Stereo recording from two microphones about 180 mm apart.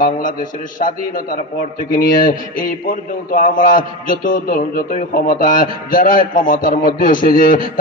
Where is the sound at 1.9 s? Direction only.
50° left (ahead or behind).